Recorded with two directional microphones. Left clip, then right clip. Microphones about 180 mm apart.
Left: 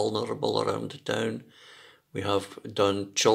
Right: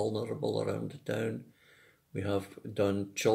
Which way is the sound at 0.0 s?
15° right (ahead or behind).